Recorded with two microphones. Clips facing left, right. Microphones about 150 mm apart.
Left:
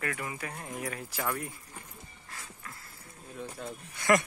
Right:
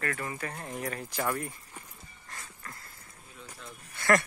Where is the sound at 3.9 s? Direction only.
15° left (ahead or behind).